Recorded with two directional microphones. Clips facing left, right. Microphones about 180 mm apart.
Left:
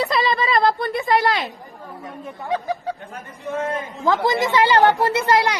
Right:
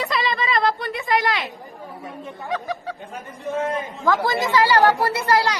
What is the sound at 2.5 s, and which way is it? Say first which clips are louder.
Speech: left 3 dB; 35° left (ahead or behind).